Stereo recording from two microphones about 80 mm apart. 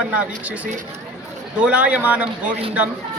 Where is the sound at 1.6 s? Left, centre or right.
Centre.